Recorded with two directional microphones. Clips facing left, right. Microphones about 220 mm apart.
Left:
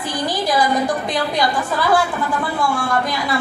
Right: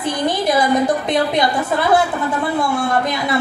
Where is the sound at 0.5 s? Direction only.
25° right (ahead or behind).